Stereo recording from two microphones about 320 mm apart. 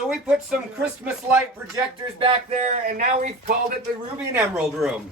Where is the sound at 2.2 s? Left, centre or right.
Centre.